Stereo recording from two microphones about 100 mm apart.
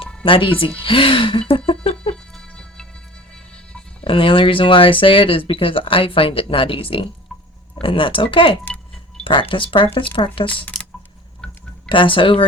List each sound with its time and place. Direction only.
0.3 s speech: 60° left (ahead or behind)
0.8 s laughter: 60° left (ahead or behind)
2.3 s music: 10° left (ahead or behind)
4.0 s speech: 60° left (ahead or behind)
8.6 s a sound: 10° left (ahead or behind)
9.2 s speech: 55° left (ahead or behind)
10.5 s speech: 15° left (ahead or behind)
11.9 s speech: 60° left (ahead or behind)